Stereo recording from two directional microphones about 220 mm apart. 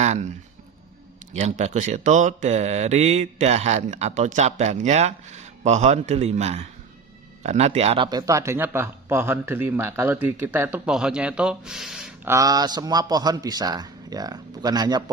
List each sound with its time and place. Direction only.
0.0 s speech: 30° right (ahead or behind)
1.3 s speech: 35° right (ahead or behind); by 15.1 s 20° right (ahead or behind)